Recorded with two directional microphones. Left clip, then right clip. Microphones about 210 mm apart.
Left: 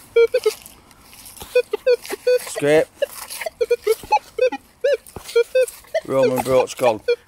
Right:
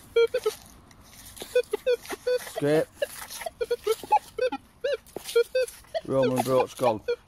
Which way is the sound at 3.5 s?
30° left (ahead or behind).